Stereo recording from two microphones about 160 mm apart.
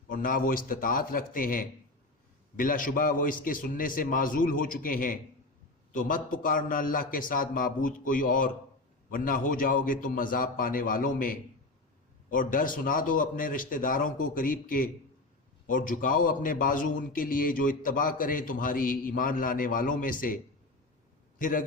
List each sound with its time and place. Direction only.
0.1 s a man's voice: 60° left (ahead or behind)